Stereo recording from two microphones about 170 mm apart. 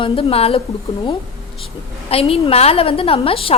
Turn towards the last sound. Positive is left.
turn(degrees=35)  # may be behind; listen again after turning